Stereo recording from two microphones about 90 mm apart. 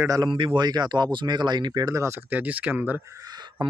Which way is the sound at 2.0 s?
20° right (ahead or behind).